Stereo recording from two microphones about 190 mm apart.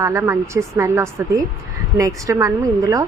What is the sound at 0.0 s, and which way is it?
A woman's voice, 15° right (ahead or behind).